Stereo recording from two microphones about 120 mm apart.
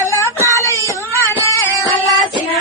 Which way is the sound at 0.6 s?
25° left (ahead or behind).